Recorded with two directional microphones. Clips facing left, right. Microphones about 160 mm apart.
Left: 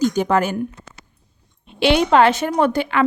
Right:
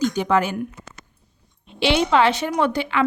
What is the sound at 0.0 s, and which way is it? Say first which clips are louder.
Speech: left 2 dB; 40° left (ahead or behind).